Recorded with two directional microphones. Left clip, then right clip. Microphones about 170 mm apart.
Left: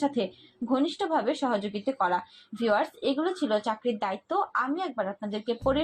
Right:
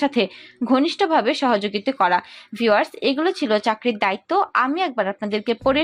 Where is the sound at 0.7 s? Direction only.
30° right (ahead or behind).